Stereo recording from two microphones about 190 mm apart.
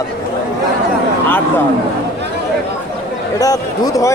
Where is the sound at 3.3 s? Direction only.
20° left (ahead or behind).